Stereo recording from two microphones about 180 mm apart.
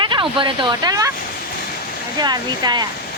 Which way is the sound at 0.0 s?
25° right (ahead or behind).